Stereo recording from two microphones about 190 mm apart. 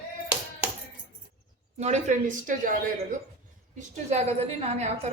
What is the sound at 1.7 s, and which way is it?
Speech, 35° right (ahead or behind).